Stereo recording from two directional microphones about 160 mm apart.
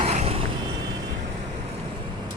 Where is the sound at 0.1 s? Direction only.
45° right (ahead or behind).